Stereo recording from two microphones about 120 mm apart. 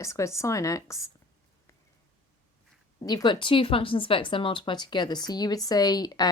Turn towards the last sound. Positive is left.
turn(degrees=35)  # may be behind; listen again after turning